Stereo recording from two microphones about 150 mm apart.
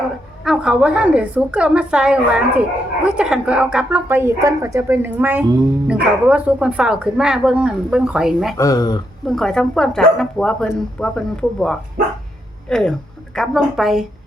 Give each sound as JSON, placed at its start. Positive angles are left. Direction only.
{"t": 0.4, "sound": "a woman's voice", "side_deg": -5}
{"t": 8.5, "sound": "speech", "side_deg": 20}
{"t": 9.2, "sound": "speech", "side_deg": 5}